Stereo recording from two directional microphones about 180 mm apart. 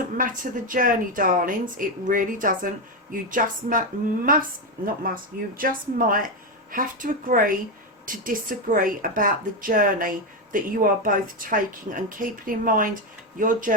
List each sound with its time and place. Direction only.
0.2 s speech: 50° right (ahead or behind)